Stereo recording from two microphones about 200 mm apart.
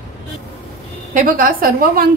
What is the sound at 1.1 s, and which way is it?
Speech, 45° right (ahead or behind).